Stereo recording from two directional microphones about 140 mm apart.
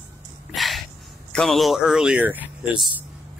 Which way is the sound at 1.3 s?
Centre (ahead or behind).